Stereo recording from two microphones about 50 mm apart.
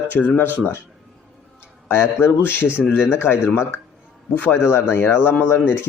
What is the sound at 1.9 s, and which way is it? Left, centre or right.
Speech, left.